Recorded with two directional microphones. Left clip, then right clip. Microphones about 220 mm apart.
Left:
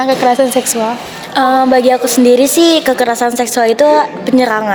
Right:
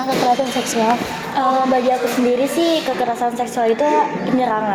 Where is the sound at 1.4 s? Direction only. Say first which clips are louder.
Left 7 dB; 50° left (ahead or behind).